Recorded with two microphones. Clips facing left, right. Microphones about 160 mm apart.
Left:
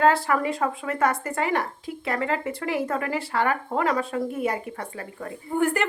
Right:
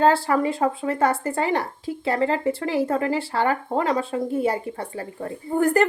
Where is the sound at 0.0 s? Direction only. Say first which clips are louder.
Right 2 dB; 30° right (ahead or behind).